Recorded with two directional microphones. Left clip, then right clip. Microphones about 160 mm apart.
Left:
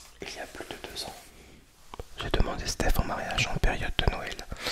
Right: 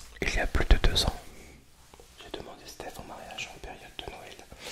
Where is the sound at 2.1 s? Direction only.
55° left (ahead or behind).